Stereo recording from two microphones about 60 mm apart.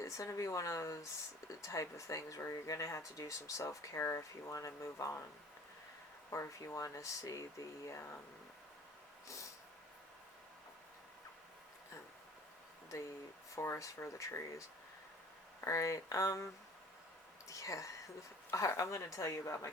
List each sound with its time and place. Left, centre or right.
0.0 s speech: left
6.3 s speech: left
9.2 s snort: left
13.6 s speech: left
15.6 s speech: left
17.5 s speech: left